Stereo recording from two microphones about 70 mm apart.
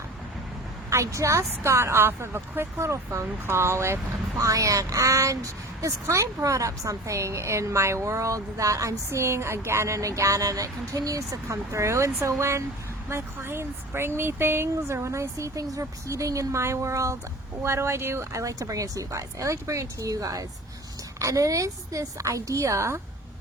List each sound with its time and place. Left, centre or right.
0.9 s speech: right
4.4 s speech: right